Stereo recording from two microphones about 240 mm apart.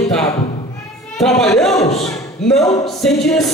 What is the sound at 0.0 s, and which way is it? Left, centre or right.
Meow, centre.